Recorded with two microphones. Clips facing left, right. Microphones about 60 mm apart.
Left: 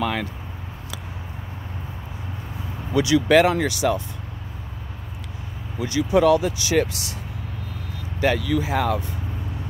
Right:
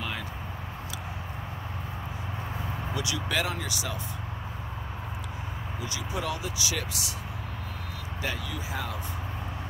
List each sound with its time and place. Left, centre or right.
0.0 s a sound: left
2.9 s speech: left
5.8 s speech: left
6.6 s speech: left
8.2 s speech: left